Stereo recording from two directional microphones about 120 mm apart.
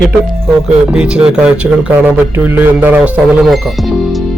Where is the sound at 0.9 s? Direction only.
10° right (ahead or behind).